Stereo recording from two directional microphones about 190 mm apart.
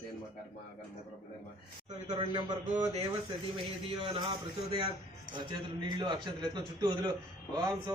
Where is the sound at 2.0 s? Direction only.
25° right (ahead or behind).